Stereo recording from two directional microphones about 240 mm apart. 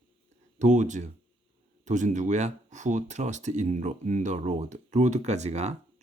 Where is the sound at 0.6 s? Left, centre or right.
Right.